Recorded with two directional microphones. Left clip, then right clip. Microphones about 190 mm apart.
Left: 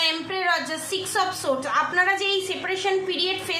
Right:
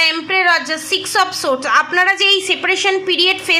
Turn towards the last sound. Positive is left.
turn(degrees=-50)  # may be behind; listen again after turning